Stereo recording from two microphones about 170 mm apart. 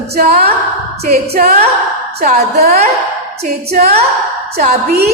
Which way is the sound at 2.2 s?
50° right (ahead or behind).